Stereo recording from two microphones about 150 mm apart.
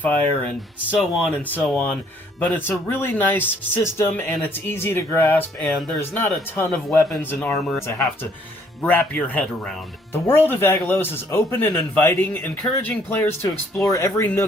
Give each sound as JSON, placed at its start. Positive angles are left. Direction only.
{"t": 0.0, "sound": "speech", "side_deg": 10}
{"t": 0.9, "sound": "speech", "side_deg": 0}
{"t": 1.4, "sound": "speech", "side_deg": 10}